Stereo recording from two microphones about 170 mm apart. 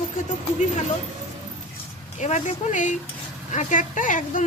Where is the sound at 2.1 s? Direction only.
45° left (ahead or behind).